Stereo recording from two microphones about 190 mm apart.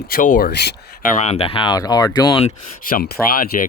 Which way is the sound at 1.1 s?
35° left (ahead or behind).